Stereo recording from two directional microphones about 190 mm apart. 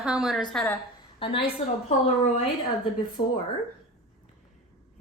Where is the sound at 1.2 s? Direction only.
25° left (ahead or behind).